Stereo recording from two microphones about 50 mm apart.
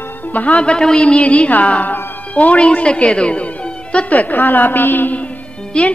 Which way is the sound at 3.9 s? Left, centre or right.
Left.